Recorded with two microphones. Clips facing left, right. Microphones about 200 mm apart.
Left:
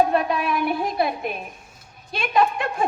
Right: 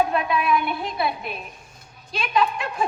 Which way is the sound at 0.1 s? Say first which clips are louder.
Even; 40° left (ahead or behind).